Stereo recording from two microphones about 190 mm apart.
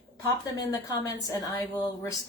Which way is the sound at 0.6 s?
20° left (ahead or behind).